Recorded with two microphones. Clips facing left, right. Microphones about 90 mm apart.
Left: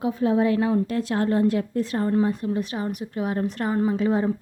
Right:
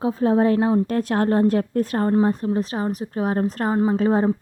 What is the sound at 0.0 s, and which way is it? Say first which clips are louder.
Speech: right 3 dB; 35° right (ahead or behind).